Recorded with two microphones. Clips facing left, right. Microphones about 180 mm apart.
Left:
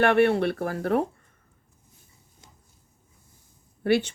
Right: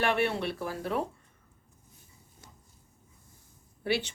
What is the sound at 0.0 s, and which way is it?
Speech, 55° left (ahead or behind).